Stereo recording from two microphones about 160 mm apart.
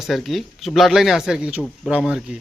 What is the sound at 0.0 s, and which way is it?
Speech, centre (ahead or behind).